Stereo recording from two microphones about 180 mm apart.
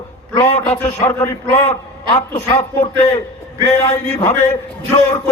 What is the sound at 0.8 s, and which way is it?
A man's voice, 35° left (ahead or behind).